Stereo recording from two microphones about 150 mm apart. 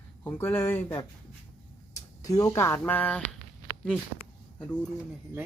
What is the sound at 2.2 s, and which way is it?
Speech, 25° left (ahead or behind).